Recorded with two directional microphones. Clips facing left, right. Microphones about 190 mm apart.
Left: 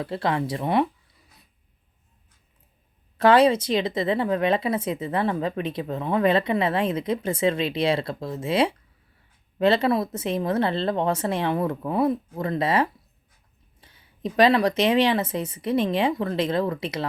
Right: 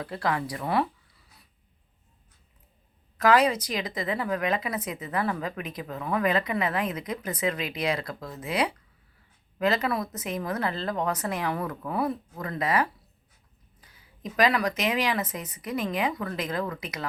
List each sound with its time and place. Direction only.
0.0 s speech: 25° left (ahead or behind)
3.2 s speech: 30° left (ahead or behind)